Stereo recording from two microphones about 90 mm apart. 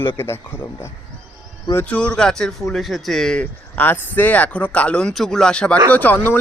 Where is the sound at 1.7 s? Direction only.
15° left (ahead or behind).